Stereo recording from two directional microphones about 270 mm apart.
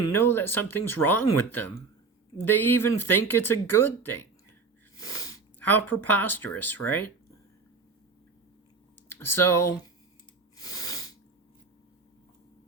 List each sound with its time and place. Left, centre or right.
0.1 s speech: centre
9.1 s speech: centre
10.6 s a sound: centre